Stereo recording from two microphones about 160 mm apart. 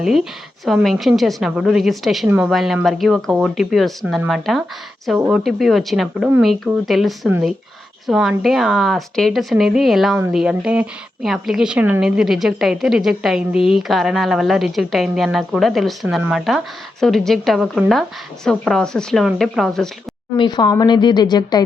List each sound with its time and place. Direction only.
0.6 s speech: centre (ahead or behind)
20.3 s speech: 30° left (ahead or behind)